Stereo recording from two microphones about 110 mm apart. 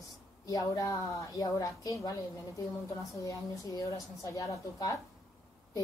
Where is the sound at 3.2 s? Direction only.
30° left (ahead or behind).